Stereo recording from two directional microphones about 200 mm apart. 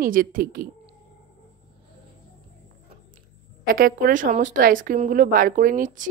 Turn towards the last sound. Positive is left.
turn(degrees=-40)  # may be behind; listen again after turning